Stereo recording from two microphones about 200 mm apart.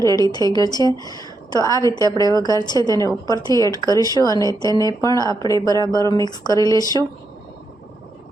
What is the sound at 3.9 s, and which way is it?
Speech, 20° left (ahead or behind).